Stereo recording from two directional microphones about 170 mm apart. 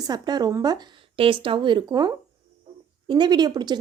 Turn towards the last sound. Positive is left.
turn(degrees=-25)  # may be behind; listen again after turning